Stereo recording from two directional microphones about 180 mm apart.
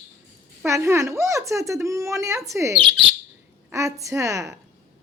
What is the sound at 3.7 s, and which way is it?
Speech, 15° right (ahead or behind).